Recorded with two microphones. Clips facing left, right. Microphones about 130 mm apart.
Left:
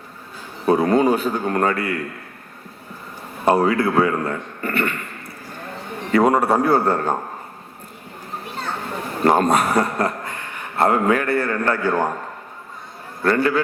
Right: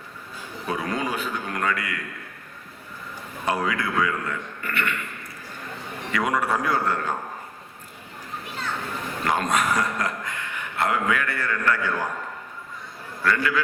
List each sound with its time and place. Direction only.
0.7 s a man's voice: 35° left (ahead or behind)
3.4 s a man's voice: 30° left (ahead or behind)
6.1 s a man's voice: 35° left (ahead or behind)
8.5 s children playing: 35° left (ahead or behind)
9.2 s a man's voice: 35° left (ahead or behind)
13.2 s a man's voice: 35° left (ahead or behind)